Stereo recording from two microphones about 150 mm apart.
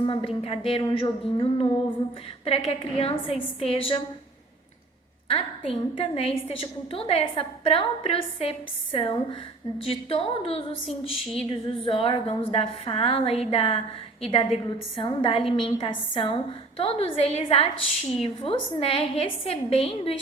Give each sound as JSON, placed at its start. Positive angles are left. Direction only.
{"t": 0.0, "sound": "a woman's voice", "side_deg": 35}
{"t": 5.3, "sound": "a woman's voice", "side_deg": 35}